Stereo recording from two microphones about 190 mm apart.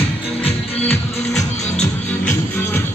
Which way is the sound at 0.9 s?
5° left (ahead or behind).